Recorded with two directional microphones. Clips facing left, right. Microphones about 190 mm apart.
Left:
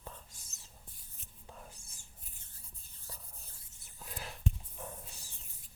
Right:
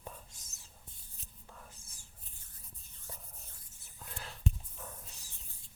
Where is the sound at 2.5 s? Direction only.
30° left (ahead or behind).